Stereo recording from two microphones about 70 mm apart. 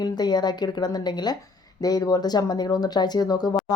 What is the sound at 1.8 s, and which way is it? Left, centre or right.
Speech, left.